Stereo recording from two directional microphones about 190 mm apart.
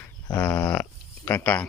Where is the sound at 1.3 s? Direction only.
5° left (ahead or behind).